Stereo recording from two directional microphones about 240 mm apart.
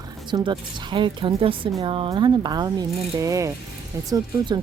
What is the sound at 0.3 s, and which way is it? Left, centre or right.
A woman's voice, centre.